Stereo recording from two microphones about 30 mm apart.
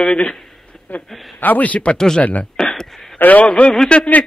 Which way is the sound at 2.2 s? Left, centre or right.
Left.